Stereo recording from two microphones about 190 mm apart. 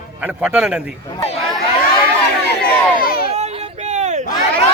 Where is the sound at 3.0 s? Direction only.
50° left (ahead or behind).